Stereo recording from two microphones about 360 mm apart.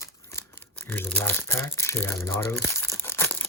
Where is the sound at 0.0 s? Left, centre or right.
Centre.